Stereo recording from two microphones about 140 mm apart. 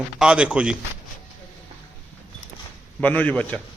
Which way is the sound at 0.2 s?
5° right (ahead or behind).